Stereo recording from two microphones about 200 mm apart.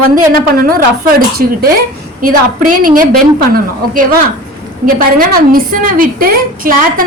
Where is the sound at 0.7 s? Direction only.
45° right (ahead or behind).